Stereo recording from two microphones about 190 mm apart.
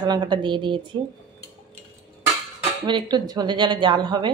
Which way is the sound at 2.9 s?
25° right (ahead or behind).